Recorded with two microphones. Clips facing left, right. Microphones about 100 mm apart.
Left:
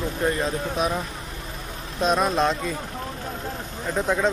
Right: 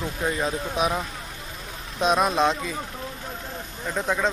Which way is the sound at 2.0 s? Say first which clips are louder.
Even; 5° right (ahead or behind).